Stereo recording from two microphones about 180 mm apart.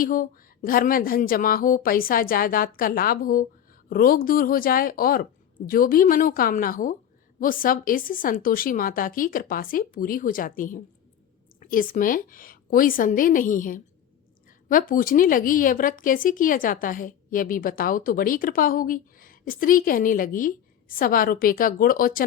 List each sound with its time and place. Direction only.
0.0 s speech: 50° left (ahead or behind)